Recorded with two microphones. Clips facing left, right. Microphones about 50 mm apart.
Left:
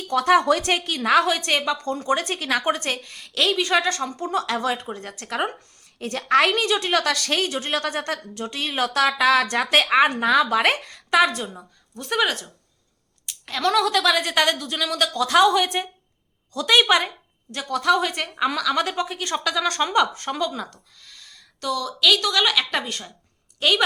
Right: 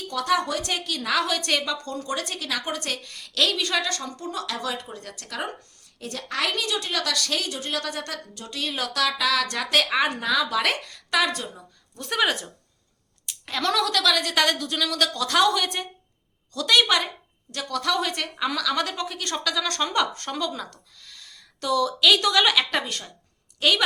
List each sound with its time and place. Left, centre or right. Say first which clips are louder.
0.1 s speech: left 7 dB; left
3.0 s a woman's voice: left 1 dB; left
11.9 s a woman's voice: left 1 dB; centre